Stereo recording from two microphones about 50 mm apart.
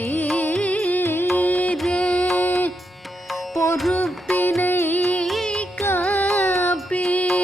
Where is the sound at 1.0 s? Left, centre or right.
Left.